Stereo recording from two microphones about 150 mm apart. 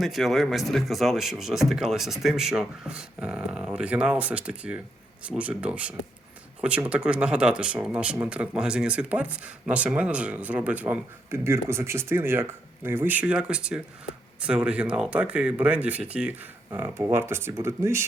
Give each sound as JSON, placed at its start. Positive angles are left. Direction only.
{"t": 0.0, "sound": "speech", "side_deg": 0}